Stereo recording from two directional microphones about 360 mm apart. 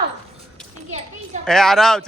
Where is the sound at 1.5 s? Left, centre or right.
Centre.